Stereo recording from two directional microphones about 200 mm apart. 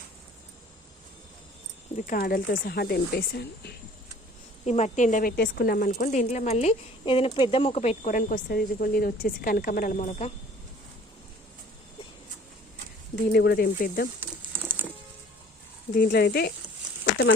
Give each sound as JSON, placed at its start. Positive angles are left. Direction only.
{"t": 2.0, "sound": "speech", "side_deg": 40}
{"t": 4.6, "sound": "speech", "side_deg": 35}
{"t": 13.1, "sound": "speech", "side_deg": 55}
{"t": 14.2, "sound": "a sound", "side_deg": -10}
{"t": 16.0, "sound": "speech", "side_deg": 50}